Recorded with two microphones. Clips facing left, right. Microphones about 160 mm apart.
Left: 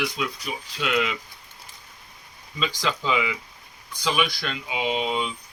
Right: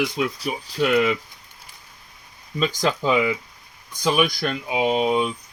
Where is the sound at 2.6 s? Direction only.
45° right (ahead or behind).